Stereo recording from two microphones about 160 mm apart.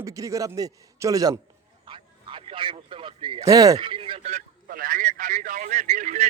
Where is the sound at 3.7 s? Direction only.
35° right (ahead or behind).